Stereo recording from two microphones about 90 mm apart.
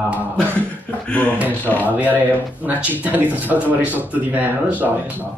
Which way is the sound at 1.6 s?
20° left (ahead or behind).